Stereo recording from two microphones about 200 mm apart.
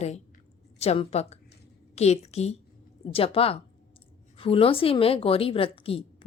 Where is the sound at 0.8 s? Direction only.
30° left (ahead or behind).